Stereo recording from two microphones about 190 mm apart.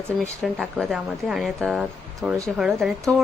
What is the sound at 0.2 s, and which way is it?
A woman's voice, centre (ahead or behind).